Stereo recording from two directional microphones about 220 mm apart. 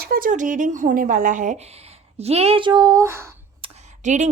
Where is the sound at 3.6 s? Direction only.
30° right (ahead or behind).